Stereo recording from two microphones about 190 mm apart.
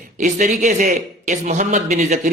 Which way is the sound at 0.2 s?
40° right (ahead or behind).